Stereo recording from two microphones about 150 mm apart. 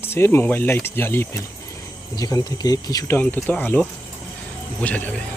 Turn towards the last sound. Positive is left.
turn(degrees=10)  # may be behind; listen again after turning